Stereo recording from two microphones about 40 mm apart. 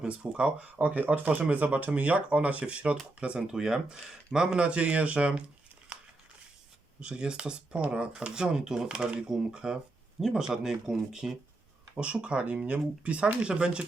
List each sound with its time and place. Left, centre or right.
0.0 s speech: right
3.4 s speech: centre
4.5 s speech: right
5.9 s crumpling: right
7.0 s speech: right
11.9 s speech: right